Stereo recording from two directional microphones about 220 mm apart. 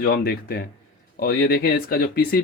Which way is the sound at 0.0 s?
45° left (ahead or behind).